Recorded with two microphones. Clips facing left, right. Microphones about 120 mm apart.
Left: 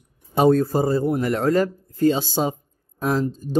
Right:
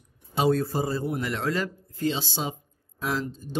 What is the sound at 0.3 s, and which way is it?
A man's voice, 50° left (ahead or behind).